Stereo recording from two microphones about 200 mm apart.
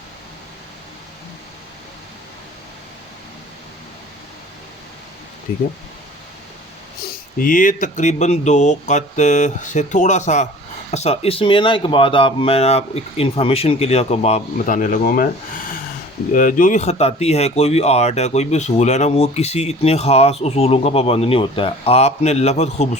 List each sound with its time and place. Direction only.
7.0 s speech: 45° left (ahead or behind)
16.3 s speech: 45° left (ahead or behind)